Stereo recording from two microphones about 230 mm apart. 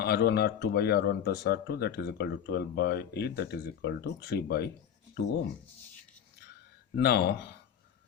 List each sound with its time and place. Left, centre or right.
0.0 s speech: left
6.9 s speech: left